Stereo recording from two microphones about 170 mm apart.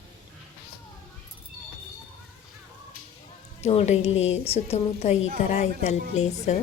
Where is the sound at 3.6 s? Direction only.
40° left (ahead or behind).